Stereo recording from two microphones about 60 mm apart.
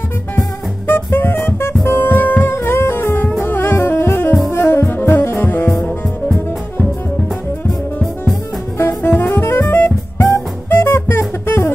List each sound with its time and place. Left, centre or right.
0.4 s music: left
4.5 s saxophone: left
6.2 s music: left
8.7 s jazz: left
9.1 s music: left